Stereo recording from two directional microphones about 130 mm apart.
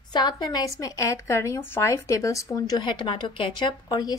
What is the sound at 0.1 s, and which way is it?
Speech, 35° left (ahead or behind).